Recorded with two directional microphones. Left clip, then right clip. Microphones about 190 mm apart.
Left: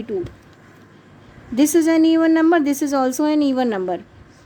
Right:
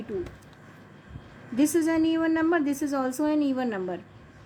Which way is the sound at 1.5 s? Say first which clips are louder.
Left 8 dB; 45° left (ahead or behind).